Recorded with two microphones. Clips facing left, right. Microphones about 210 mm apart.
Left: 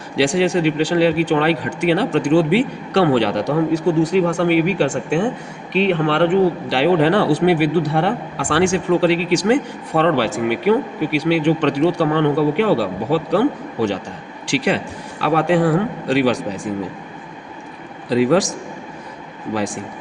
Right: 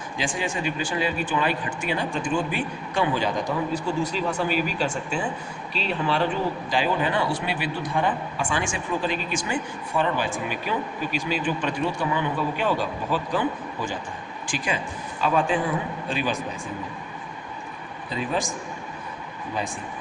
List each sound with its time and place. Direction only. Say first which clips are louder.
0.2 s a man's voice: left 12 dB; 75° left (ahead or behind)
18.1 s a man's voice: left 13 dB; 85° left
19.5 s a man's voice: left 8 dB; 80° left